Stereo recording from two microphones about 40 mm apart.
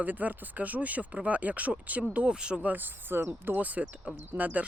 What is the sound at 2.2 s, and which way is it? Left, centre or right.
Speech, right.